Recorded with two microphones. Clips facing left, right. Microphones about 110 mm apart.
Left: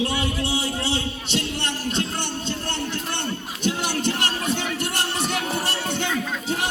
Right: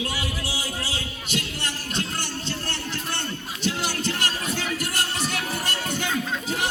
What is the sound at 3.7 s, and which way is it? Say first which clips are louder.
Music: left 3 dB; 20° left (ahead or behind).